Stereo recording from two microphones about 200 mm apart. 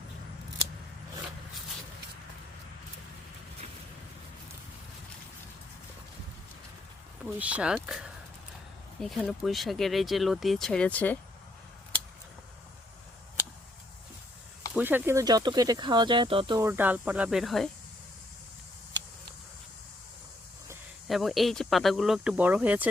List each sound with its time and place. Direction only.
7.3 s speech: 5° right (ahead or behind)
14.7 s speech: 10° right (ahead or behind); by 16.6 s 25° right (ahead or behind)
16.6 s speech: 10° right (ahead or behind)
21.1 s speech: centre (ahead or behind)